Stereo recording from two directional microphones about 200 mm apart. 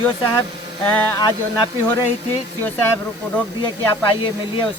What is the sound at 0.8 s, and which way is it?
Speech, 10° left (ahead or behind).